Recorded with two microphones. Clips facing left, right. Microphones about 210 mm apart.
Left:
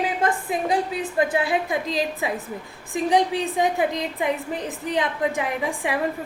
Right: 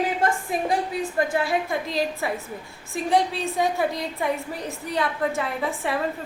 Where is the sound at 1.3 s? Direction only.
20° left (ahead or behind).